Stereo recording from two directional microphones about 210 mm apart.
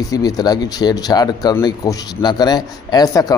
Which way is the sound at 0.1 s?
15° left (ahead or behind).